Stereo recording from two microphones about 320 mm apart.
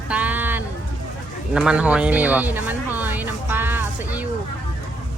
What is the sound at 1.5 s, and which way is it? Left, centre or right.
Speech, centre.